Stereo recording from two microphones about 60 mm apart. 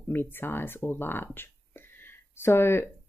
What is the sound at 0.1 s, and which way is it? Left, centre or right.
Speech, left.